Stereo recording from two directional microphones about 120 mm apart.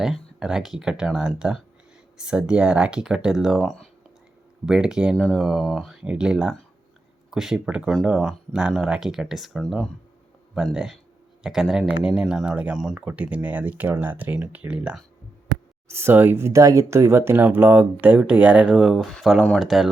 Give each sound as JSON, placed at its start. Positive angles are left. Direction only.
{"t": 0.0, "sound": "speech", "side_deg": -5}
{"t": 4.6, "sound": "speech", "side_deg": -5}
{"t": 15.9, "sound": "speech", "side_deg": -20}